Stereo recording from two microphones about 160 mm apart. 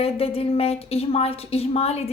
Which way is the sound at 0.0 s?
35° left (ahead or behind).